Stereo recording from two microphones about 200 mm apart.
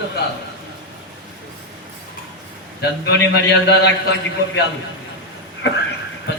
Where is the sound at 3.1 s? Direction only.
55° left (ahead or behind).